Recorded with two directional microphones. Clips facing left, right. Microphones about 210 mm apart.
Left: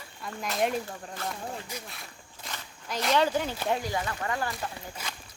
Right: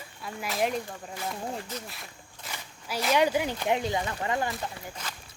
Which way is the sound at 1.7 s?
10° left (ahead or behind).